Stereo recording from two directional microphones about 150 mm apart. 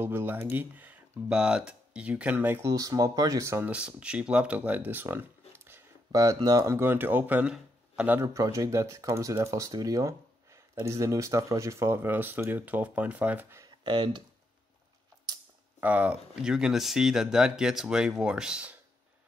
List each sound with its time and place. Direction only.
0.0 s speech: 15° right (ahead or behind)
13.8 s speech: 30° right (ahead or behind)
15.8 s speech: 10° right (ahead or behind)